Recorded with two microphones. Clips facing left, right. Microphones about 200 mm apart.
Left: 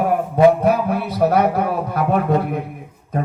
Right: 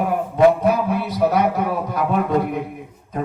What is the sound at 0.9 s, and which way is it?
A man's voice, 55° left (ahead or behind).